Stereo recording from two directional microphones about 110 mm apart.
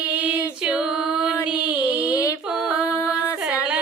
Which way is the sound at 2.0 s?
30° left (ahead or behind).